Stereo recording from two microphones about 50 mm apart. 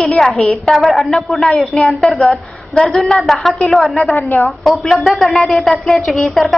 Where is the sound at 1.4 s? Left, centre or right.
Centre.